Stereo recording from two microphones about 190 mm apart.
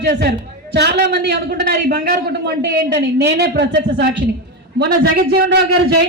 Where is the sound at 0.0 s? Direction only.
55° right (ahead or behind).